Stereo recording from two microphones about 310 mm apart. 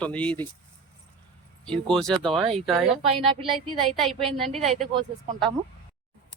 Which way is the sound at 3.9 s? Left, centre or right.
Centre.